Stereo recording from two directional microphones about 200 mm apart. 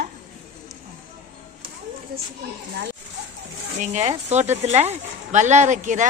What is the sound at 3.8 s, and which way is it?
Speech, 35° right (ahead or behind).